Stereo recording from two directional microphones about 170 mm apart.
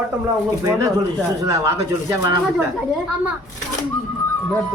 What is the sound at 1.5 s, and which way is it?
Speech, 15° right (ahead or behind).